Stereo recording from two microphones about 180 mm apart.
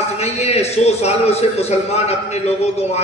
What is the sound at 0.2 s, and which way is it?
A man's voice, 35° left (ahead or behind).